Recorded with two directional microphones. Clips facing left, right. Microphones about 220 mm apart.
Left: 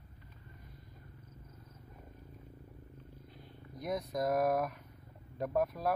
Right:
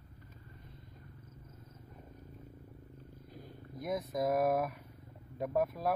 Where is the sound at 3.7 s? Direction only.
Centre (ahead or behind).